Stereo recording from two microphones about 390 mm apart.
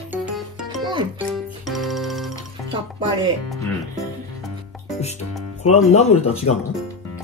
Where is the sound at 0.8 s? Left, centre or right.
Centre.